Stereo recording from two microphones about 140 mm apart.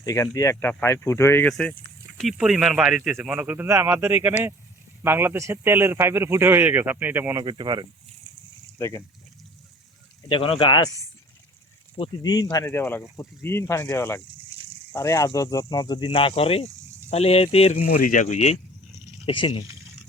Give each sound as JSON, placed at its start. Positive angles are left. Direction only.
{"t": 0.0, "sound": "speech", "side_deg": 25}
{"t": 1.5, "sound": "speech", "side_deg": 5}
{"t": 7.4, "sound": "speech", "side_deg": -35}
{"t": 8.8, "sound": "speech", "side_deg": 20}
{"t": 10.2, "sound": "speech", "side_deg": 40}
{"t": 12.3, "sound": "speech", "side_deg": 30}
{"t": 12.6, "sound": "speech", "side_deg": 15}
{"t": 17.8, "sound": "speech", "side_deg": 70}
{"t": 19.2, "sound": "speech", "side_deg": 35}